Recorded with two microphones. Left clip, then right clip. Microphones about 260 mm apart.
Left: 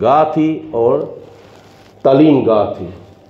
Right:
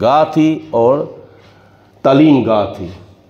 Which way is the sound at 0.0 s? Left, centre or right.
Right.